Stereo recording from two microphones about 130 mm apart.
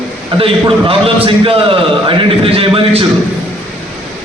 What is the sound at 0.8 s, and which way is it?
A man's voice, 45° right (ahead or behind).